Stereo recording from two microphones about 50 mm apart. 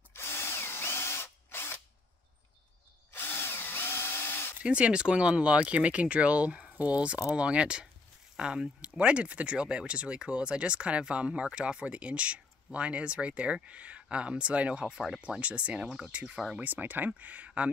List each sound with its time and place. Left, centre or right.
0.1 s drill: left
3.1 s drill: left
4.6 s speech: right